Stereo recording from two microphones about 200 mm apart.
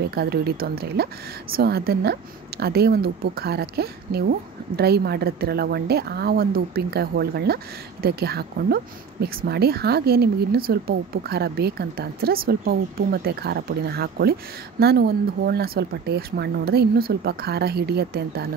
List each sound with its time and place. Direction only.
0.1 s speech: 50° right (ahead or behind)